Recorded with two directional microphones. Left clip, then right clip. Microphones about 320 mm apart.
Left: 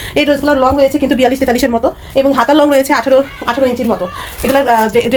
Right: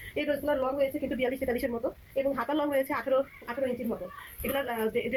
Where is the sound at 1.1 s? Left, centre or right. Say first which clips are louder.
Left 19 dB; left.